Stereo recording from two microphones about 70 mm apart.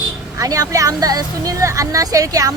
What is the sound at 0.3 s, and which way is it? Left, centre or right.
Speech, right.